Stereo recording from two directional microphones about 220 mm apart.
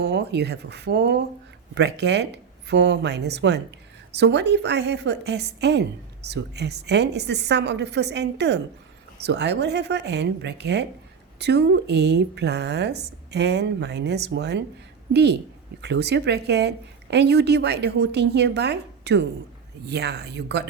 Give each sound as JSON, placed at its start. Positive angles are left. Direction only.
{"t": 0.0, "sound": "a woman's voice", "side_deg": -50}